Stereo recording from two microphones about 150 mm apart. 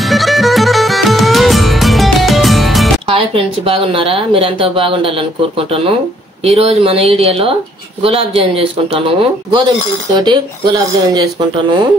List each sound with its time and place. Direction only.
0.0 s music: centre (ahead or behind)
3.1 s speech: 35° right (ahead or behind)